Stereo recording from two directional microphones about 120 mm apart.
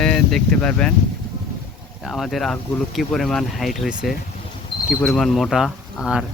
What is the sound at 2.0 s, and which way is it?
Speech, centre (ahead or behind).